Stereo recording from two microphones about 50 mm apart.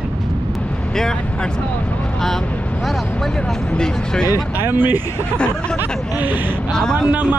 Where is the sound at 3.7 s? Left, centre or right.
Centre.